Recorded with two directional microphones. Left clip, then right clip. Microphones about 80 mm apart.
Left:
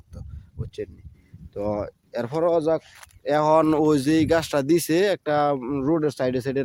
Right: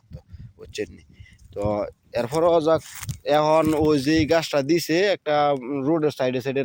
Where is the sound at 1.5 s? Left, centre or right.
Left; by 2.8 s centre.